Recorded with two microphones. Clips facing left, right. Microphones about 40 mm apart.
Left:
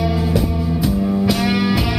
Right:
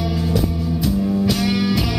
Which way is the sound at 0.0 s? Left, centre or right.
Centre.